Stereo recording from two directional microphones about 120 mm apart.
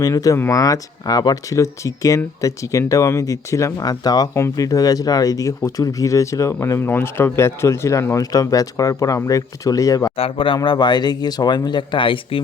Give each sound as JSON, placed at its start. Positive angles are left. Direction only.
{"t": 0.0, "sound": "speech", "side_deg": 30}
{"t": 10.2, "sound": "speech", "side_deg": 50}